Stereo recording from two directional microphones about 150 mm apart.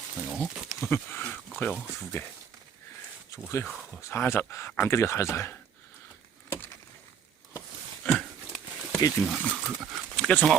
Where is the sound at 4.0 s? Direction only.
15° left (ahead or behind).